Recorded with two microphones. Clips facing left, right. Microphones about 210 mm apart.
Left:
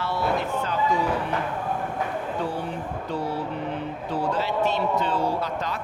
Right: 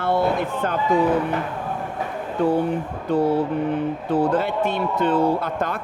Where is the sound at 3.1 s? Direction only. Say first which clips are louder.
Right 10 dB; 55° right (ahead or behind).